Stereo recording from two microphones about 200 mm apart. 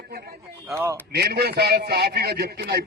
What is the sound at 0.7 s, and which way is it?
Speech, 15° right (ahead or behind).